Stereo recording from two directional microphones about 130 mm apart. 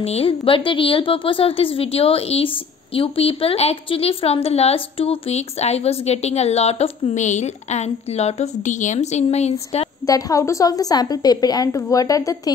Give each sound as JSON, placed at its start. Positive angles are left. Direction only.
{"t": 0.0, "sound": "a woman's voice", "side_deg": 50}
{"t": 10.0, "sound": "a woman's voice", "side_deg": 30}